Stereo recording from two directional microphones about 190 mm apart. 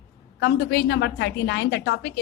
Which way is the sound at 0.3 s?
60° left (ahead or behind).